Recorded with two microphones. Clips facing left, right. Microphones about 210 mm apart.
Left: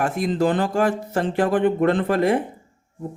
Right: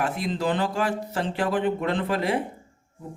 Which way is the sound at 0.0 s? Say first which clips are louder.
Left 6 dB; 50° left (ahead or behind).